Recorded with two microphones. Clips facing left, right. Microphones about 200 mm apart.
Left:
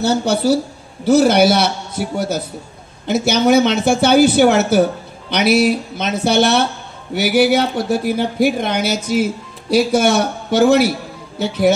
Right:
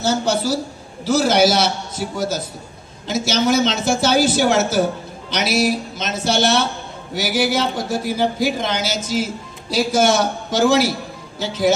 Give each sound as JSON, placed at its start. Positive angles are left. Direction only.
{"t": 0.0, "sound": "speech", "side_deg": 60}